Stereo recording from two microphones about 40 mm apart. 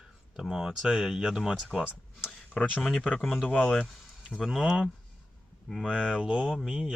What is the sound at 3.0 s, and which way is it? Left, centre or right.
Speech, left.